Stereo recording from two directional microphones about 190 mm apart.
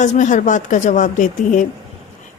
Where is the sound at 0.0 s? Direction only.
40° left (ahead or behind).